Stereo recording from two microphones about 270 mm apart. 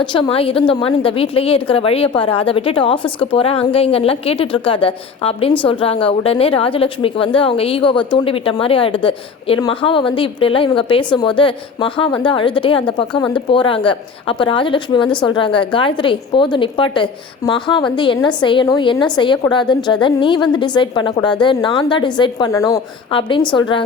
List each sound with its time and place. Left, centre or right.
0.0 s a woman's voice: centre